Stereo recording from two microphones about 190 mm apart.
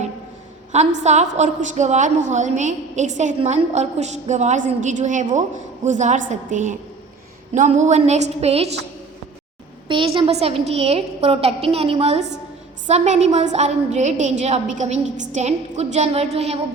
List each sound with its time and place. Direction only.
0.7 s a woman's voice: 35° right (ahead or behind)
9.9 s a woman's voice: 25° right (ahead or behind)